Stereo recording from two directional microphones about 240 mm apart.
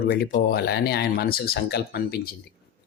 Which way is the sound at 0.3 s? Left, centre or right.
Left.